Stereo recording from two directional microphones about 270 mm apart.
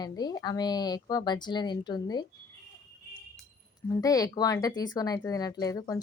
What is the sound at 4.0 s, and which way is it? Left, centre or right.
A woman's voice, centre.